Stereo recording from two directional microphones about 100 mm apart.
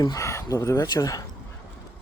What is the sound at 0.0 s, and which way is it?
Speech, 35° left (ahead or behind).